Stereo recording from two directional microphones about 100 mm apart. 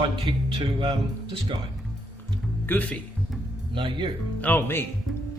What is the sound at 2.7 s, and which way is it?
Speech, 15° left (ahead or behind).